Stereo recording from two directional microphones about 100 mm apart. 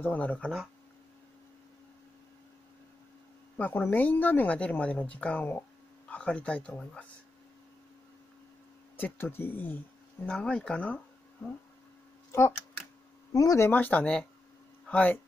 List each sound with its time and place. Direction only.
0.0 s speech: 15° left (ahead or behind)
3.5 s speech: 15° left (ahead or behind)
8.9 s speech: 20° left (ahead or behind)
12.3 s speech: 25° left (ahead or behind)
13.7 s speech: 15° left (ahead or behind)